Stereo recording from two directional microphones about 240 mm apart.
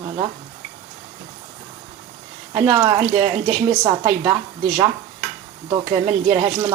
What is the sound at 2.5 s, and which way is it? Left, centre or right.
Speech, centre.